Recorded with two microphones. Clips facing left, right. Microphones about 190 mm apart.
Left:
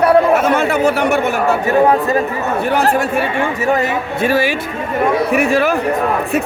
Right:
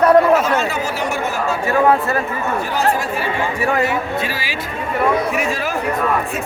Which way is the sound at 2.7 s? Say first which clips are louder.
Left 6 dB; 60° left (ahead or behind).